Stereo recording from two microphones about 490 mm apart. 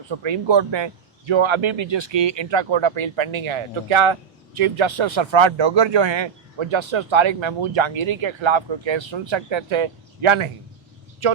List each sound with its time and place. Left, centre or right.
0.1 s speech: right